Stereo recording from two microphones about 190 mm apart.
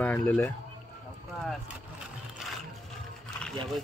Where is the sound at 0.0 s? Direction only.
10° left (ahead or behind).